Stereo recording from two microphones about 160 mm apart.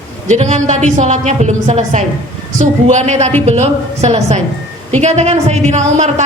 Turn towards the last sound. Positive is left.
turn(degrees=-45)  # may be behind; listen again after turning